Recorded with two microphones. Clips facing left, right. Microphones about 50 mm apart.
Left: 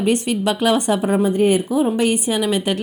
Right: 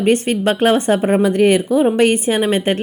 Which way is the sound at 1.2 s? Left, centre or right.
Right.